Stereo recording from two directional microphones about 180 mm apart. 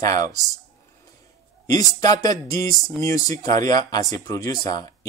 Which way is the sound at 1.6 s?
20° left (ahead or behind).